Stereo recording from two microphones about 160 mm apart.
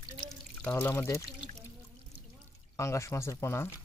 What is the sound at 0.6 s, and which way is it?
Speech, 10° left (ahead or behind).